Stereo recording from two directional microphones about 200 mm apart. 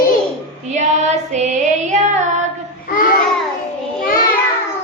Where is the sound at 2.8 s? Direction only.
45° left (ahead or behind).